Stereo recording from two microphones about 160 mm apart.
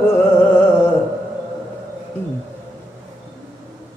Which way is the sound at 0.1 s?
15° left (ahead or behind).